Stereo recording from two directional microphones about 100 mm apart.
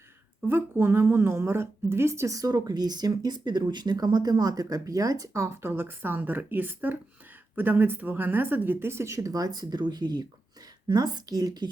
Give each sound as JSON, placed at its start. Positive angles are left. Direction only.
{"t": 0.4, "sound": "a woman's voice", "side_deg": -20}